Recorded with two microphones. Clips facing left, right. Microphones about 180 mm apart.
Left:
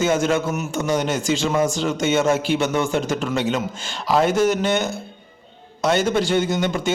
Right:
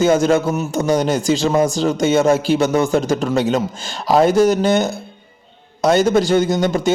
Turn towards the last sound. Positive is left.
turn(degrees=-40)  # may be behind; listen again after turning